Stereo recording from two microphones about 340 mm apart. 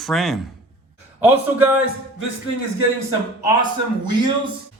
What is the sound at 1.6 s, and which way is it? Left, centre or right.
Speech, centre.